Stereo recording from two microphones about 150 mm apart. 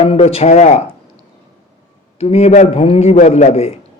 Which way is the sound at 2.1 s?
45° left (ahead or behind).